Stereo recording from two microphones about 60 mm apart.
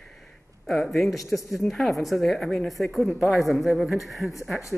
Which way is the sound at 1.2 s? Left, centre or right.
Left.